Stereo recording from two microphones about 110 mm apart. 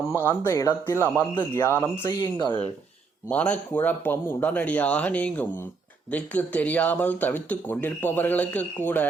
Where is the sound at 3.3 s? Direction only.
10° left (ahead or behind).